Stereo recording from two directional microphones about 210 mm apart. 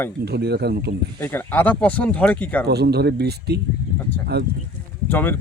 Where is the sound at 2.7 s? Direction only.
50° right (ahead or behind).